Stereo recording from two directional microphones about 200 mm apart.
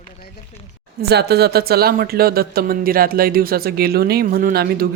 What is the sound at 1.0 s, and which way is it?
Speech, 55° right (ahead or behind).